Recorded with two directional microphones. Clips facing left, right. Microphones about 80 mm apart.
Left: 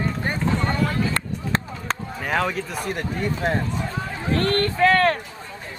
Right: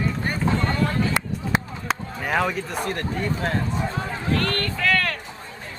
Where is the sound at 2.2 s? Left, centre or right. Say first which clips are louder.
Even; centre.